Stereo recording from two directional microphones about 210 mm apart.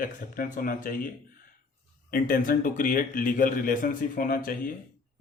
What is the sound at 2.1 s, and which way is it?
Speech, 40° left (ahead or behind).